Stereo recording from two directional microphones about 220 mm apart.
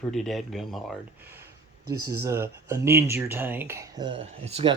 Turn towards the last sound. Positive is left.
turn(degrees=-25)  # may be behind; listen again after turning